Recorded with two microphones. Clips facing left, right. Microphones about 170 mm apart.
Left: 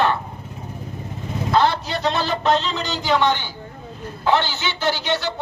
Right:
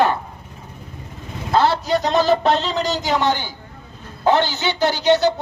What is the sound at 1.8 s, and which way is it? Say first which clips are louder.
A woman's voice: right 5 dB; 40° right (ahead or behind).